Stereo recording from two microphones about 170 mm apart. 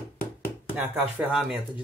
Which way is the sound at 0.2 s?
15° left (ahead or behind).